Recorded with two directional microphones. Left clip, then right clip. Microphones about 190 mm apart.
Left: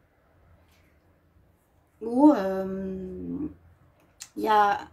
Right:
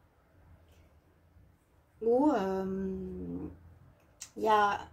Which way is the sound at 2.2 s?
50° left (ahead or behind).